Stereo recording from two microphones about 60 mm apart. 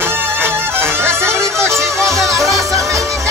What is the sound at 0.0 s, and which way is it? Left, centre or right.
Music, right.